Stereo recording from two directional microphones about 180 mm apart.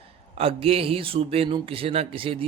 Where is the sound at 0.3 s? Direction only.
35° right (ahead or behind).